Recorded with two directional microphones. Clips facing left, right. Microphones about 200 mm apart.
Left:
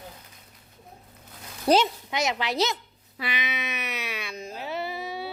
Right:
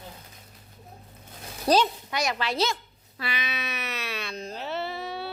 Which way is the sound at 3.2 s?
20° left (ahead or behind).